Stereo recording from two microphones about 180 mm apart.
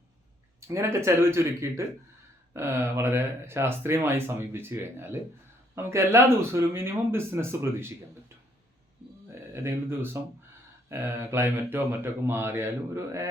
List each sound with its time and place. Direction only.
0.7 s speech: 15° right (ahead or behind)
9.3 s speech: 15° right (ahead or behind)